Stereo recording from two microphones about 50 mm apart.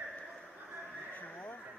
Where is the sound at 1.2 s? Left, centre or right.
Left.